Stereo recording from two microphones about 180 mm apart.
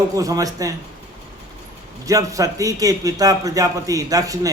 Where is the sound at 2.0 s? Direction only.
20° right (ahead or behind).